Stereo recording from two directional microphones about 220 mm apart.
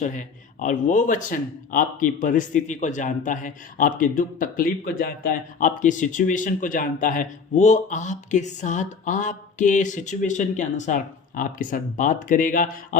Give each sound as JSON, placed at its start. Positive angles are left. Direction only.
{"t": 0.0, "sound": "a man's voice", "side_deg": 35}